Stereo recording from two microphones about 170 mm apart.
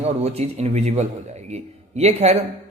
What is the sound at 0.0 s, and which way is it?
A man's voice, 35° right (ahead or behind).